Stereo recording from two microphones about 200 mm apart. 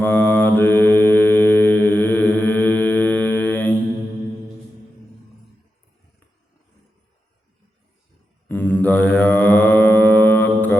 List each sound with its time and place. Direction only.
0.0 s mantra: 10° left (ahead or behind)
8.4 s mantra: 10° left (ahead or behind)